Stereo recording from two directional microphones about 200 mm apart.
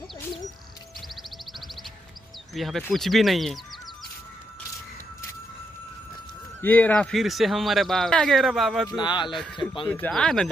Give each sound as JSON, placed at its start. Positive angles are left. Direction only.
{"t": 2.5, "sound": "speech", "side_deg": 0}
{"t": 6.6, "sound": "speech", "side_deg": 10}
{"t": 8.9, "sound": "speech", "side_deg": 20}
{"t": 9.3, "sound": "speech", "side_deg": 0}